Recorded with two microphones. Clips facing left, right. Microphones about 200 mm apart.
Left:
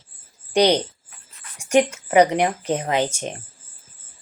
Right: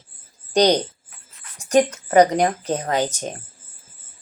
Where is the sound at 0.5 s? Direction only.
10° left (ahead or behind).